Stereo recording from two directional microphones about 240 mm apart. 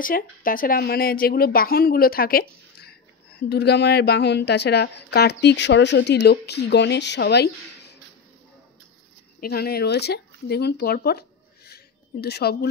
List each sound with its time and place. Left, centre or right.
0.0 s a woman's voice: left
3.4 s a woman's voice: left
9.4 s speech: left